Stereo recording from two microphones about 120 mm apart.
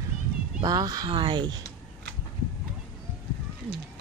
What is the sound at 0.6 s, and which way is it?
Speech, 30° right (ahead or behind).